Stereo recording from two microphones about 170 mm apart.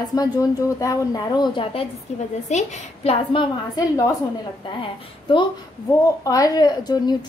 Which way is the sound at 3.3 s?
20° left (ahead or behind).